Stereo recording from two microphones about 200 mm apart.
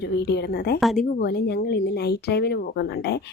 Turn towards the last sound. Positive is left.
turn(degrees=55)  # may be behind; listen again after turning